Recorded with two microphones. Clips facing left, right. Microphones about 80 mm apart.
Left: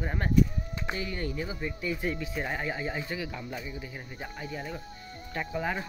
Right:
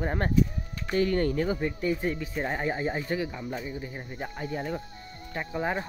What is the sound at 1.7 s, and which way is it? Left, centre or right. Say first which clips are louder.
Speech: right 4 dB; right.